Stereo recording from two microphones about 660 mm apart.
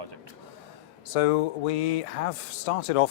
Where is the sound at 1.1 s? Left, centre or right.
Left.